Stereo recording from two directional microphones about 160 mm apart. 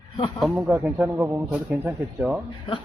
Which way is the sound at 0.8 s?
15° right (ahead or behind).